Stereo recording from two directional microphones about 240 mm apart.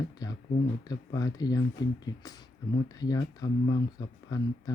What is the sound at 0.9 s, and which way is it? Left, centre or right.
Speech, centre.